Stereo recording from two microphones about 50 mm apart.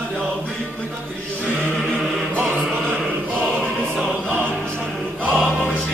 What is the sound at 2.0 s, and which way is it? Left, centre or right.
Music, centre.